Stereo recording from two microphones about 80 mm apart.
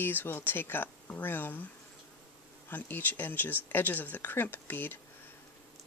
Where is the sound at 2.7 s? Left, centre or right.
Left.